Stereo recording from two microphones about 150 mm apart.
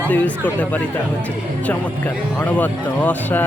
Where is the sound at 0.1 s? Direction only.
10° left (ahead or behind).